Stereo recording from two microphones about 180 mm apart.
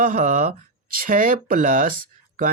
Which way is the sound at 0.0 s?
45° right (ahead or behind).